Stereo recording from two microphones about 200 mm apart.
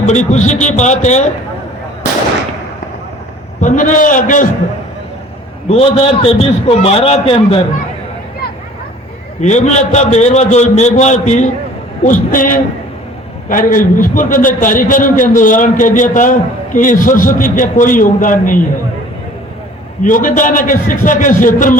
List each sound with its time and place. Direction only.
0.0 s a man's voice: 35° left (ahead or behind)
3.6 s a man's voice: 40° left (ahead or behind)
5.6 s a man's voice: 30° left (ahead or behind)
9.4 s a man's voice: 35° left (ahead or behind)
20.0 s a man's voice: 40° left (ahead or behind)